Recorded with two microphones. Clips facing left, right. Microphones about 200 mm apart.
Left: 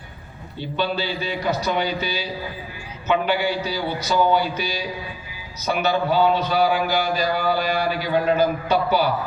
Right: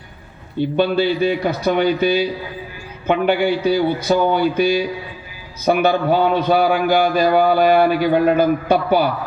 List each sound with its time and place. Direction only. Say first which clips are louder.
0.6 s a man's voice: right 8 dB; 55° right (ahead or behind)